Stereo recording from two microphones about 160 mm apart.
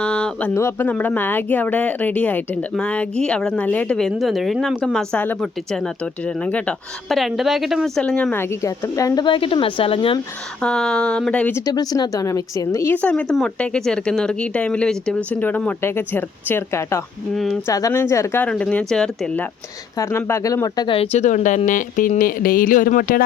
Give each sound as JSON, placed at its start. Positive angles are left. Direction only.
{"t": 0.0, "sound": "a sound", "side_deg": 5}
{"t": 0.5, "sound": "speech", "side_deg": 15}
{"t": 10.6, "sound": "speech", "side_deg": 5}
{"t": 11.6, "sound": "a woman's voice", "side_deg": 25}
{"t": 17.3, "sound": "speech", "side_deg": 0}
{"t": 17.7, "sound": "speech", "side_deg": 20}